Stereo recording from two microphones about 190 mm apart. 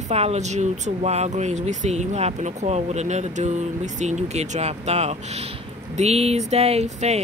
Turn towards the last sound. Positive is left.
turn(degrees=-35)  # may be behind; listen again after turning